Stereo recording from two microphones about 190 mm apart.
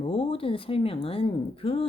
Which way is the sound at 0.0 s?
30° left (ahead or behind).